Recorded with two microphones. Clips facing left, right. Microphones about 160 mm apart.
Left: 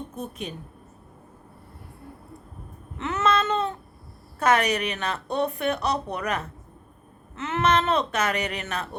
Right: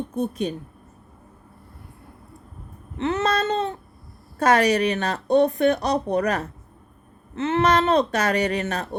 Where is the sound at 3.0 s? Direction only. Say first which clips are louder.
Right 2 dB; 30° right (ahead or behind).